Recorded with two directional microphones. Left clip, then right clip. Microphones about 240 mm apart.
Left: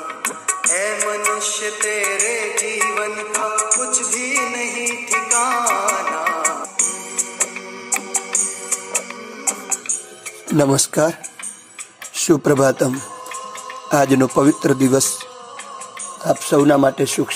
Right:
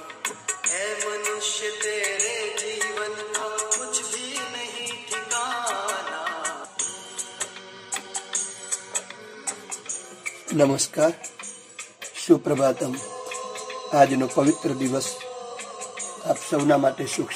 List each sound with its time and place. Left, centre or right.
0.2 s music: left
10.5 s speech: left
12.3 s speech: left
13.8 s speech: left
16.4 s speech: left